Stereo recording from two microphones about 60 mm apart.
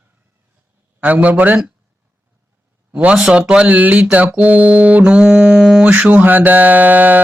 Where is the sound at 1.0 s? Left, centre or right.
Right.